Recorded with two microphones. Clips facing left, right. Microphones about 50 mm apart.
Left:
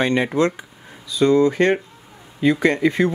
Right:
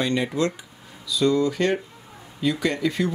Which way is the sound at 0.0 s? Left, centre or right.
Left.